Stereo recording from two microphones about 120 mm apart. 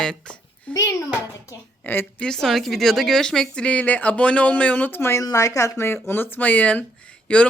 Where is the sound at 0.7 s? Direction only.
25° left (ahead or behind).